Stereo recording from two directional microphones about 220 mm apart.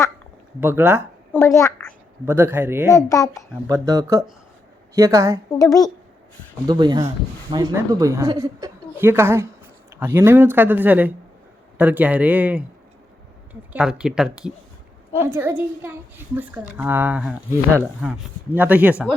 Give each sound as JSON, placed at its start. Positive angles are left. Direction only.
{"t": 0.6, "sound": "a child's voice", "side_deg": -10}
{"t": 1.3, "sound": "speech", "side_deg": 10}
{"t": 2.2, "sound": "a child's voice", "side_deg": -10}
{"t": 3.1, "sound": "speech", "side_deg": 15}
{"t": 3.7, "sound": "a child's voice", "side_deg": -15}
{"t": 5.5, "sound": "speech", "side_deg": 15}
{"t": 6.7, "sound": "a child's voice", "side_deg": -20}